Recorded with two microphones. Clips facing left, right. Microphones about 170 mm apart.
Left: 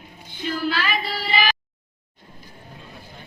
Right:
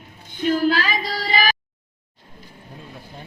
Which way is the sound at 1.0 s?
40° right (ahead or behind).